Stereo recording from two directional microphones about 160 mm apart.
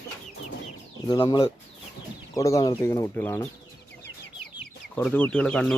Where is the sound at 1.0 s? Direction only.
25° left (ahead or behind).